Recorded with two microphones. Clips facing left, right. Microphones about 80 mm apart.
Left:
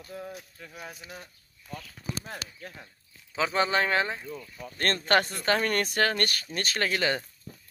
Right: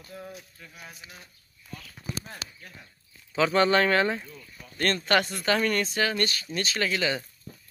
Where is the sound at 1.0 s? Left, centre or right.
Left.